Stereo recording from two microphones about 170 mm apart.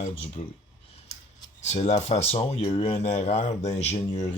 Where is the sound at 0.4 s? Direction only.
35° left (ahead or behind).